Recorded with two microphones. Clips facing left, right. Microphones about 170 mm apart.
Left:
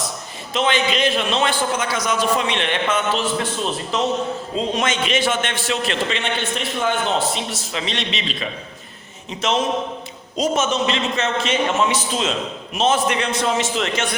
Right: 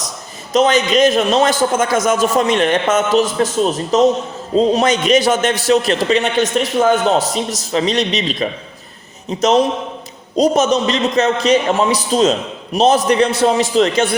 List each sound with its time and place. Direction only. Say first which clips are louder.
0.5 s a man's voice: right 7 dB; 40° right (ahead or behind)